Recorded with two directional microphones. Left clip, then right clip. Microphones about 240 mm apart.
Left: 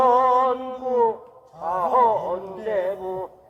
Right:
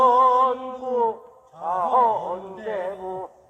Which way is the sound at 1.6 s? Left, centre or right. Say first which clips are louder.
Left 1 dB; centre.